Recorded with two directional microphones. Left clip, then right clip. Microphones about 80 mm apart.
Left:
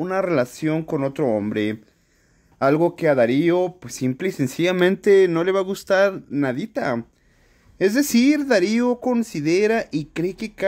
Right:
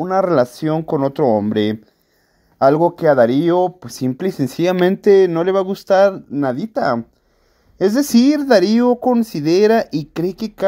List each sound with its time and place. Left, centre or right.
0.2 s speech: right
2.6 s speech: centre
5.0 s speech: centre; by 10.6 s right